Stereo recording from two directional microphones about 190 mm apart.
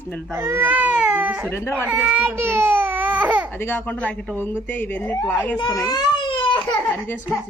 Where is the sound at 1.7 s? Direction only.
5° right (ahead or behind).